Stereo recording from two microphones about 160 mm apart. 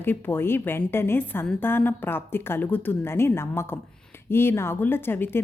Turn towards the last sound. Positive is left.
turn(degrees=15)  # may be behind; listen again after turning